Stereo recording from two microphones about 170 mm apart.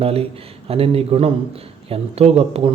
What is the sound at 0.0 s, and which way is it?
Speech, 35° right (ahead or behind).